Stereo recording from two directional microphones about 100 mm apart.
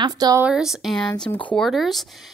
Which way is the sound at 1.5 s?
Centre (ahead or behind).